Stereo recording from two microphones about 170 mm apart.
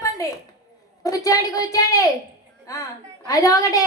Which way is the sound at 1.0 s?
20° left (ahead or behind).